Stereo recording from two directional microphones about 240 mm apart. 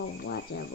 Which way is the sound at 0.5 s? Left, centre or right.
Left.